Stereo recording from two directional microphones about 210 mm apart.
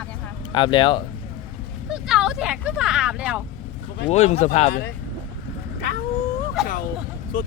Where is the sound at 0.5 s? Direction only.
25° left (ahead or behind).